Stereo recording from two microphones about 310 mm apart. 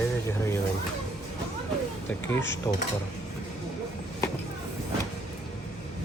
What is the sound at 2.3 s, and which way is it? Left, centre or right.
Speech, left.